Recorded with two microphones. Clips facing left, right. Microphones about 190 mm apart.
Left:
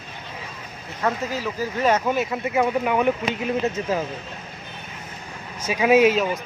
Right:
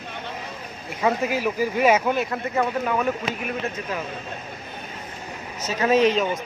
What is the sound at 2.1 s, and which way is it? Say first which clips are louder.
Speech: left 2 dB; 5° left (ahead or behind).